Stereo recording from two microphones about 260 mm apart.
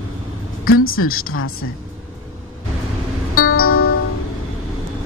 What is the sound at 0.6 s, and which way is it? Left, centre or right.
A woman's voice, left.